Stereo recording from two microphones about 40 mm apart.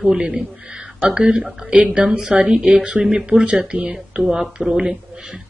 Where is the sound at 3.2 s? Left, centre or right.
Right.